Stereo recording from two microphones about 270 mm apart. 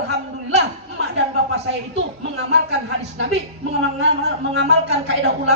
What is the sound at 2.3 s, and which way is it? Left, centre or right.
Speech, right.